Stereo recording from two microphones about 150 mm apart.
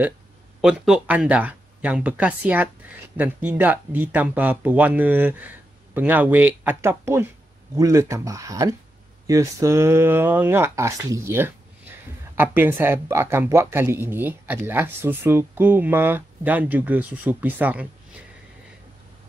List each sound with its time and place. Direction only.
0.6 s speech: 5° right (ahead or behind)